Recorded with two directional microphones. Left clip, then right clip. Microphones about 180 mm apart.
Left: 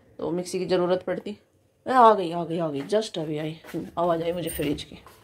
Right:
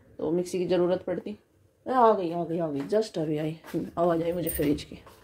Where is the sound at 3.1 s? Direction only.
20° right (ahead or behind).